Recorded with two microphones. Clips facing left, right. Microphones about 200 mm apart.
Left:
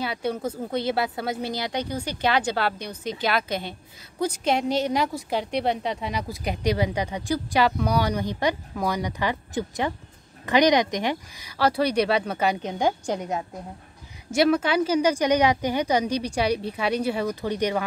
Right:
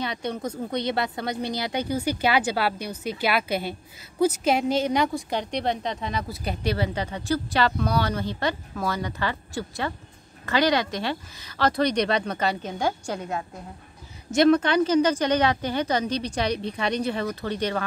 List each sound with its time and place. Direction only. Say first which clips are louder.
0.0 s speech: left 2 dB; 5° left (ahead or behind)
14.3 s speech: right 2 dB; 5° left (ahead or behind)